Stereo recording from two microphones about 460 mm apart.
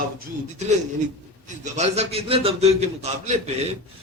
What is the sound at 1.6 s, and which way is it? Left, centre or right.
A man's voice, centre.